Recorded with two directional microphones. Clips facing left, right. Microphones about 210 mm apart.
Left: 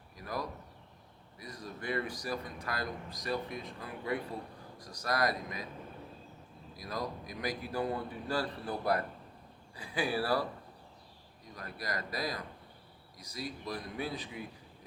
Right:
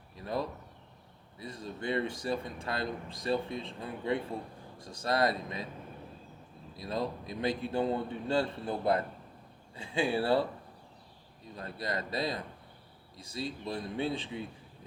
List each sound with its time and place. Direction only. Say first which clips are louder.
0.2 s a man's voice: right 4 dB; 25° right (ahead or behind)
6.7 s a man's voice: right 4 dB; 25° right (ahead or behind)
11.4 s a man's voice: right 4 dB; 25° right (ahead or behind)